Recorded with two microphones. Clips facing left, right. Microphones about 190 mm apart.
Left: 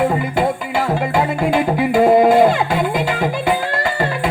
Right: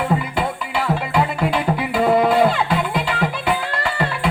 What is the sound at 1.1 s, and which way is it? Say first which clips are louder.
Music: left 3 dB; 45° left (ahead or behind).